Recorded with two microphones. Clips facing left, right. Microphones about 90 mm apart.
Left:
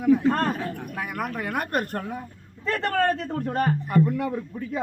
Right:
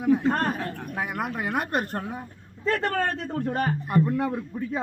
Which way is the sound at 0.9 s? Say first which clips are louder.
Right 5 dB; 25° right (ahead or behind).